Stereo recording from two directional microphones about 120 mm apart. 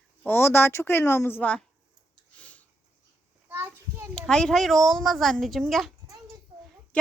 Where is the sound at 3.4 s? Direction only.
15° right (ahead or behind).